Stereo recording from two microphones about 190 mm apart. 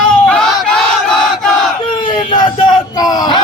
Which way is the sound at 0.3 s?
5° left (ahead or behind).